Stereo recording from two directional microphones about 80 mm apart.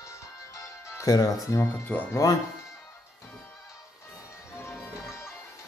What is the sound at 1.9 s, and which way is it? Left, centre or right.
Speech, centre.